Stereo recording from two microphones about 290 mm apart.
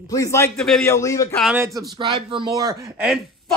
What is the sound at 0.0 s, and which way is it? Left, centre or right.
A man's voice, centre.